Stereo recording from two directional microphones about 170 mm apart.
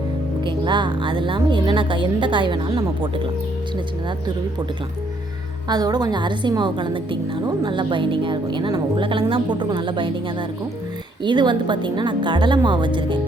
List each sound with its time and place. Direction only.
0.4 s a woman's voice: 30° right (ahead or behind)
5.6 s a woman's voice: 25° right (ahead or behind)